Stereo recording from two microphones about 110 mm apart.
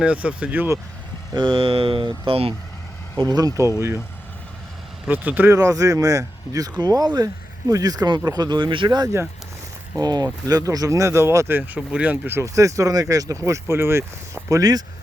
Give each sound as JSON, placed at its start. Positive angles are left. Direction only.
{"t": 0.0, "sound": "speech", "side_deg": -10}
{"t": 1.3, "sound": "speech", "side_deg": -45}
{"t": 3.2, "sound": "speech", "side_deg": -35}
{"t": 5.0, "sound": "speech", "side_deg": -15}
{"t": 5.5, "sound": "speech", "side_deg": -30}
{"t": 14.6, "sound": "speech", "side_deg": -35}